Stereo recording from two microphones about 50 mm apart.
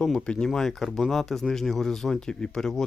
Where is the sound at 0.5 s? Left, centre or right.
Centre.